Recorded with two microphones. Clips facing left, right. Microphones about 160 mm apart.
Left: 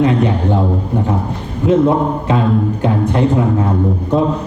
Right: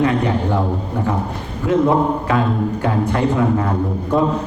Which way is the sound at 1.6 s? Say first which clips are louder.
Left 3 dB; 20° left (ahead or behind).